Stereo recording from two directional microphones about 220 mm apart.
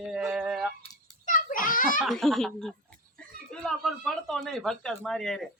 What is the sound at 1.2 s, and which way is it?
Children playing, 35° left (ahead or behind).